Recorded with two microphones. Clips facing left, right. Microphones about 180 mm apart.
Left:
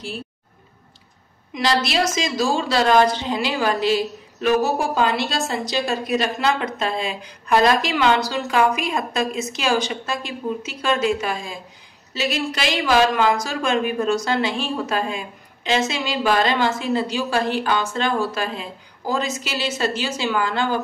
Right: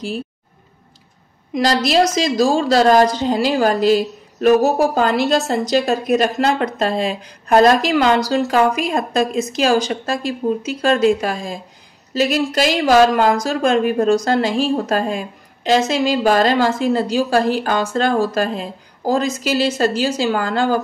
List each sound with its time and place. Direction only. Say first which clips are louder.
1.5 s a woman's voice: right 5 dB; 45° right (ahead or behind)